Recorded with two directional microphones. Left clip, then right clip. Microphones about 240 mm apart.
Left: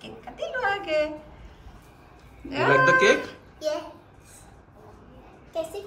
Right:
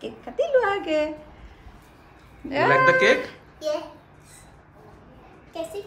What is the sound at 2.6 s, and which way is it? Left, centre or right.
A woman's voice, centre.